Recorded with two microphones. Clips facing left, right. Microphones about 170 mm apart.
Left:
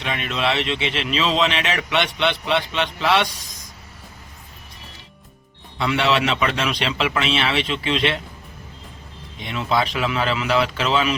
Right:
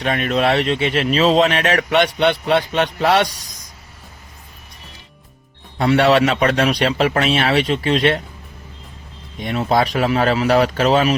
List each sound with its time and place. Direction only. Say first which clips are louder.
0.0 s speech: right 6 dB; 45° right (ahead or behind)
5.7 s speech: right 6 dB; 45° right (ahead or behind)
9.4 s speech: right 5 dB; 45° right (ahead or behind)